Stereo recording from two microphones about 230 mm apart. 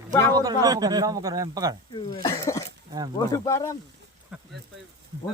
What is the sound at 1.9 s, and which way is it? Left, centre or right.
Speech, left.